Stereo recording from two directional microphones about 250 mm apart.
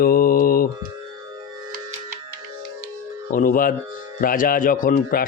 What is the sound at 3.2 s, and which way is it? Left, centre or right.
Speech, left.